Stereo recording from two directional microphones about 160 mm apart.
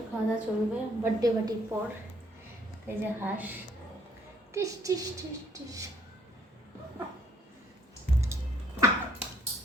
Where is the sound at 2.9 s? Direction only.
10° right (ahead or behind).